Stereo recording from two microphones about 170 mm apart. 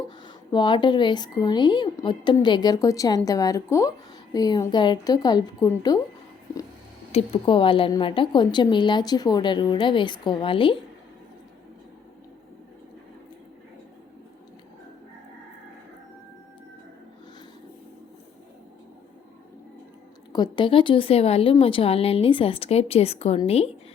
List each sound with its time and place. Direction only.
0.5 s a woman's voice: 25° left (ahead or behind)
7.1 s a woman's voice: 30° left (ahead or behind)
20.3 s a woman's voice: 25° left (ahead or behind)